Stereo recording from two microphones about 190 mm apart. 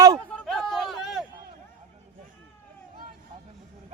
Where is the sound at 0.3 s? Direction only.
Centre (ahead or behind).